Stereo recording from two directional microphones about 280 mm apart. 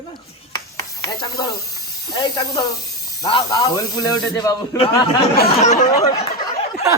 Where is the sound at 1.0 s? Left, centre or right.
Centre.